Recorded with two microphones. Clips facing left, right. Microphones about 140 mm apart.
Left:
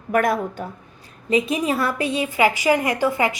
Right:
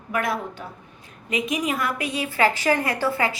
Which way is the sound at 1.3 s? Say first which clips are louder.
Left 5 dB; 30° left (ahead or behind).